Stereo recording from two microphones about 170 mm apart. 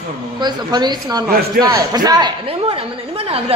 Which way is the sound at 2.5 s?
35° right (ahead or behind).